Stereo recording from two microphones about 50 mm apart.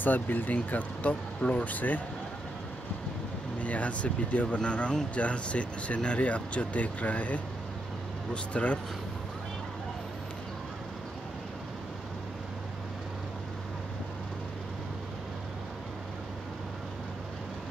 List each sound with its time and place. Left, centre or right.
0.0 s speech: left
3.6 s speech: left